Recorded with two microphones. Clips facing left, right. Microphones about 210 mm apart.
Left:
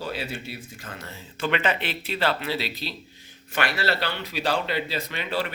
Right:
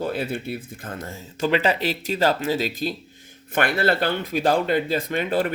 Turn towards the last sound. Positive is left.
turn(degrees=-50)  # may be behind; listen again after turning